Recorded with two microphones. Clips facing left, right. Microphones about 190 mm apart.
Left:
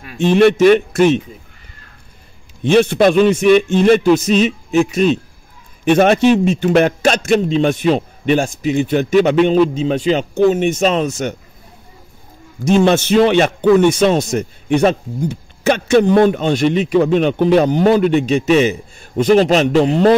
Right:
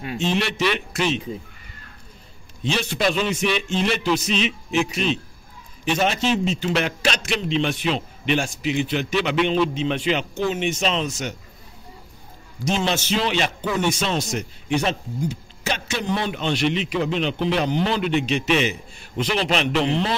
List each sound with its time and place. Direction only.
0.2 s a man's voice: 55° left (ahead or behind)
2.6 s a man's voice: 55° left (ahead or behind)
5.9 s a man's voice: 55° left (ahead or behind)
12.6 s a man's voice: 55° left (ahead or behind)